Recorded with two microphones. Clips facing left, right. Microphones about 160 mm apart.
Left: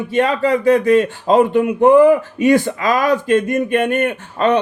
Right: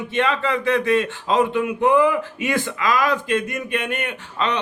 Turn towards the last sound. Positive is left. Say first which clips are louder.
# left 8 dB
turn(degrees=45)  # may be behind; listen again after turning